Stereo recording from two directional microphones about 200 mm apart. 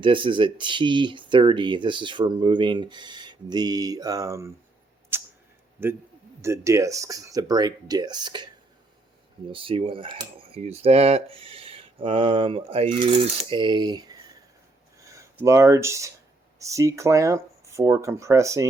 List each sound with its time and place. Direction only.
0.0 s speech: 25° right (ahead or behind)
5.1 s a sound: 10° right (ahead or behind)
5.8 s speech: 10° right (ahead or behind)
9.5 s speech: 25° right (ahead or behind)